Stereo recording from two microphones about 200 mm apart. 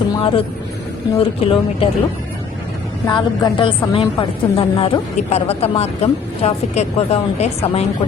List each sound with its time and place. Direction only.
0.2 s a woman's voice: 25° left (ahead or behind)
3.1 s a woman's voice: 20° left (ahead or behind)